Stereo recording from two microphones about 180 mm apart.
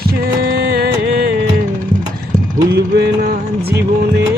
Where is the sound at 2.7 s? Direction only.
65° right (ahead or behind).